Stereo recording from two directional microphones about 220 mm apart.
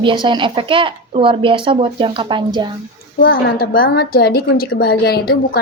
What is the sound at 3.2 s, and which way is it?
A woman's voice, 45° left (ahead or behind).